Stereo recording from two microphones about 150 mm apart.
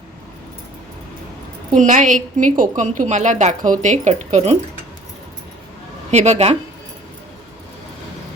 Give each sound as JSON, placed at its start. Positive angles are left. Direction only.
{"t": 1.7, "sound": "a woman's voice", "side_deg": -55}
{"t": 6.1, "sound": "a woman's voice", "side_deg": -50}